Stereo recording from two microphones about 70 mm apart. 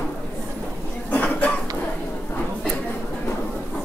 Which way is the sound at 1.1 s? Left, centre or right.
Left.